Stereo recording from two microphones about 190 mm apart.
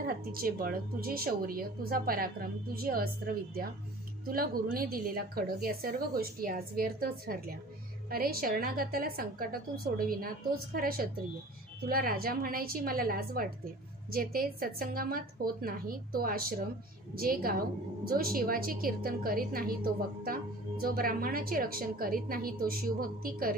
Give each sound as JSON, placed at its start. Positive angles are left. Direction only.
{"t": 0.0, "sound": "a woman's voice", "side_deg": -50}
{"t": 4.3, "sound": "a woman's voice", "side_deg": -50}